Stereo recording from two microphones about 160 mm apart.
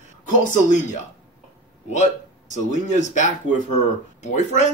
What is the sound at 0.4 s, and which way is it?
Speech, 55° left (ahead or behind).